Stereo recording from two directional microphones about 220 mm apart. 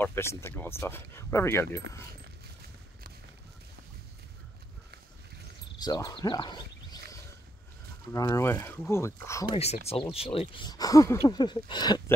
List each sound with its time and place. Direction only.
0.0 s speech: 10° left (ahead or behind)
5.8 s a sound: 20° left (ahead or behind)
8.1 s speech: 15° left (ahead or behind)
9.6 s speech: 30° left (ahead or behind)